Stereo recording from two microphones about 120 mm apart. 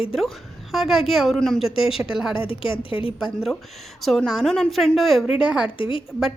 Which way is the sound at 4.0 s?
Centre (ahead or behind).